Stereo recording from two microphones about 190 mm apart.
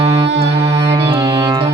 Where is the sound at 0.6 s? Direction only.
20° right (ahead or behind).